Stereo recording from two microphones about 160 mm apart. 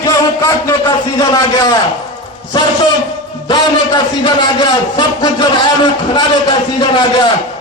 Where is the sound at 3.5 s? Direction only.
25° left (ahead or behind).